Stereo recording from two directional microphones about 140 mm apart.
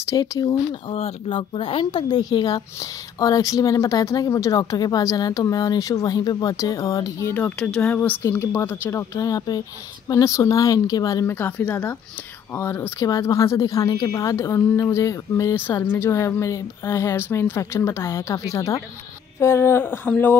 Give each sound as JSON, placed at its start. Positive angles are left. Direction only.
{"t": 0.1, "sound": "speech", "side_deg": 25}
{"t": 0.9, "sound": "speech", "side_deg": 40}